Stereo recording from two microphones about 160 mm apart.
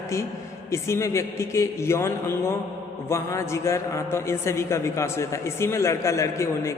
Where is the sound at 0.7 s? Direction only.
15° left (ahead or behind).